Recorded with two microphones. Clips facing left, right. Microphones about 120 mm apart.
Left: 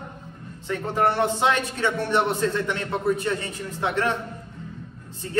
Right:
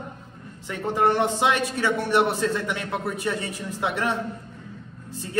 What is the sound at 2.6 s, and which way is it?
Speech, 5° right (ahead or behind).